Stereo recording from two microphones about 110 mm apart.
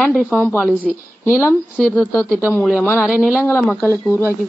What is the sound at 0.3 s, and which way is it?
Speech, 15° left (ahead or behind).